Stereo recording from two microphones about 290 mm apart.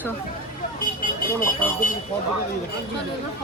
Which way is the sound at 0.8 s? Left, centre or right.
Left.